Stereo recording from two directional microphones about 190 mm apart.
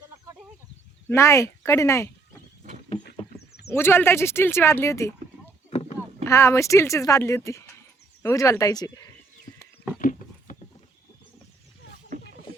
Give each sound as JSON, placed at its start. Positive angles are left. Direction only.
{"t": 1.0, "sound": "speech", "side_deg": 15}
{"t": 3.7, "sound": "speech", "side_deg": 10}
{"t": 5.7, "sound": "a sound", "side_deg": 35}
{"t": 6.2, "sound": "speech", "side_deg": 15}
{"t": 10.0, "sound": "horse", "side_deg": 45}